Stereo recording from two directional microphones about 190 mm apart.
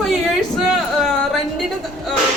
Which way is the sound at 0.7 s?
Centre (ahead or behind).